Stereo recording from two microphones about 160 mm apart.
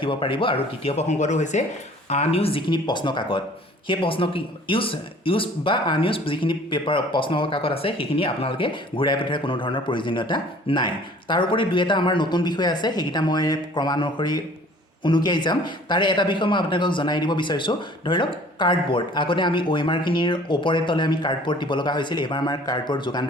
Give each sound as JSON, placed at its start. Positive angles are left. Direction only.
{"t": 0.0, "sound": "a man's voice", "side_deg": 30}